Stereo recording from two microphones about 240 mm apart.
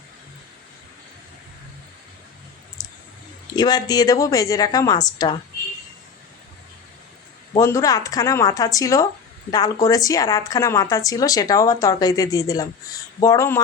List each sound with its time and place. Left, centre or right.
2.8 s a sound: centre
3.5 s speech: centre
7.5 s speech: centre